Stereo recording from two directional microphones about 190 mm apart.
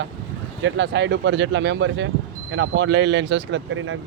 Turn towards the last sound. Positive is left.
turn(degrees=-90)